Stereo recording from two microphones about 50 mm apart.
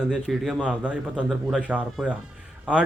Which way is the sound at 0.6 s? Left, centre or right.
Right.